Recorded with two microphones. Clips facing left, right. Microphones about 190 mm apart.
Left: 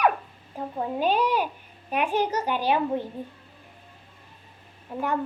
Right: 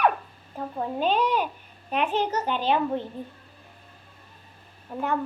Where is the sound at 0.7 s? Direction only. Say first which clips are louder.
Even; 10° left (ahead or behind).